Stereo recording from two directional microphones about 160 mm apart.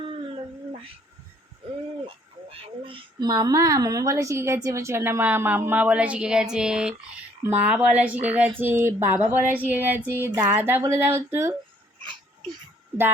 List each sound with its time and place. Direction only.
0.0 s cat: 35° right (ahead or behind)
2.0 s speech: 35° right (ahead or behind); by 6.9 s 5° right (ahead or behind)
7.4 s a sound: 10° right (ahead or behind)